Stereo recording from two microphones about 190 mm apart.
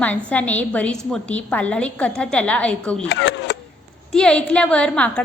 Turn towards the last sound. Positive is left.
turn(degrees=5)  # may be behind; listen again after turning